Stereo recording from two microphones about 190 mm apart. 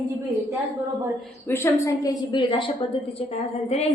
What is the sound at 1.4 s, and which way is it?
A woman's voice, 15° left (ahead or behind).